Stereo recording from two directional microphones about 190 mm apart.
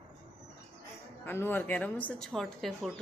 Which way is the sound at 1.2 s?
10° left (ahead or behind).